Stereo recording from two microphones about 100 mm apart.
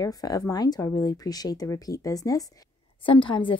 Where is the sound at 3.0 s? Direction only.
60° left (ahead or behind).